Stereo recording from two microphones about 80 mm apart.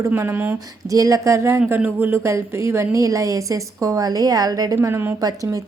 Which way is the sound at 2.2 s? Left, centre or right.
Right.